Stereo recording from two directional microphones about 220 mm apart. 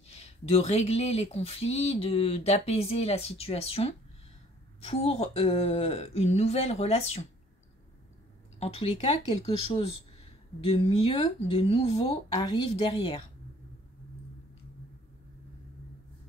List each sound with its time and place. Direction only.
0.1 s speech: 30° left (ahead or behind)
8.5 s speech: 25° left (ahead or behind)